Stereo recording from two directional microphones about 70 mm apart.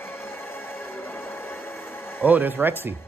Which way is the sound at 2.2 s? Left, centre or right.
Right.